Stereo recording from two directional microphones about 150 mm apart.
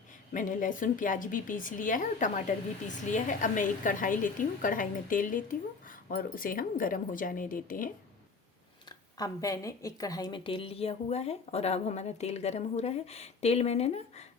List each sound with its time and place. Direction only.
0.3 s speech: 60° left (ahead or behind)
8.9 s speech: 25° left (ahead or behind); by 14.3 s 45° left (ahead or behind)